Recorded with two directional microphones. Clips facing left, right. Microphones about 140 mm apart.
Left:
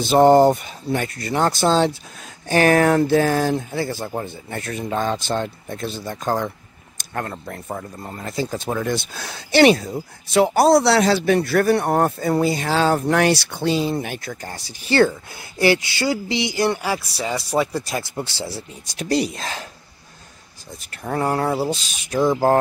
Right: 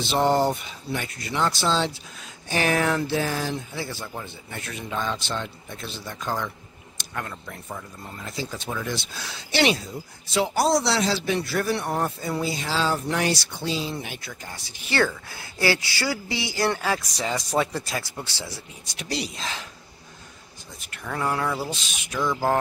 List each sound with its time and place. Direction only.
0.0 s speech: 45° left (ahead or behind); by 18.6 s 30° left (ahead or behind)
18.9 s speech: 50° left (ahead or behind)
20.8 s speech: 35° left (ahead or behind)